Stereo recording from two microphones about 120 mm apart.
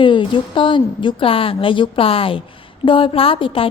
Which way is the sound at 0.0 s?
45° left (ahead or behind).